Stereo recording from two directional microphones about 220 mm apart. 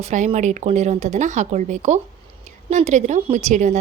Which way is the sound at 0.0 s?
30° right (ahead or behind).